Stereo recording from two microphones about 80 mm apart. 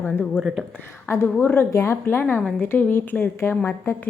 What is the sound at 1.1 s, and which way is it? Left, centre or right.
A woman's voice, left.